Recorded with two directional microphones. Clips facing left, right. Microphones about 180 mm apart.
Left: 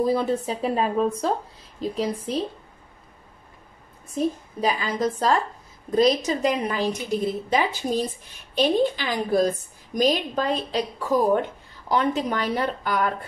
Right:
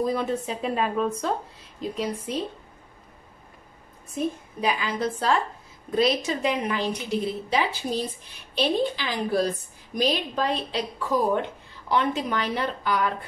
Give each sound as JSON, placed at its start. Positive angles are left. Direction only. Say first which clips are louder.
{"t": 0.0, "sound": "speech", "louder": "left 3 dB", "side_deg": 35}
{"t": 4.1, "sound": "a woman's voice", "louder": "left 3 dB", "side_deg": 35}